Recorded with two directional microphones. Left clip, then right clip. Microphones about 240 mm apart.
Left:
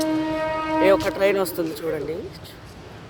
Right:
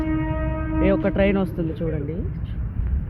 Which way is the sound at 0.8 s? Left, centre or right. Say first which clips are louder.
Left 2 dB; centre.